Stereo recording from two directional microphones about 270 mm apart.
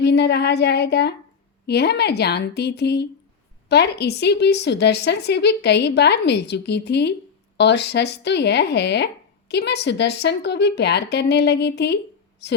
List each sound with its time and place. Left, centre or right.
0.0 s speech: left